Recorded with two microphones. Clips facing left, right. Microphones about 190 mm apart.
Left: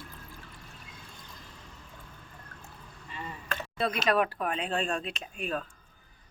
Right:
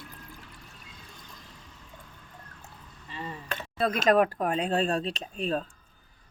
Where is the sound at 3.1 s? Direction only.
30° right (ahead or behind).